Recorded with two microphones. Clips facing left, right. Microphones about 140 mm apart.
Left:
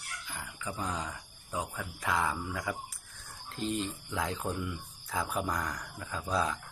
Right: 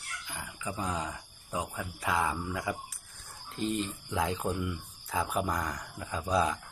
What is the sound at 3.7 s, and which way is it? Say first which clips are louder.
Speech: right 2 dB; centre (ahead or behind).